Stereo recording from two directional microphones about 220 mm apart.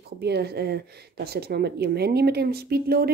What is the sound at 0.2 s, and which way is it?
Speech, 45° right (ahead or behind).